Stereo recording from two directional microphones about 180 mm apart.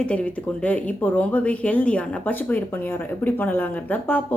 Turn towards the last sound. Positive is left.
turn(degrees=10)  # may be behind; listen again after turning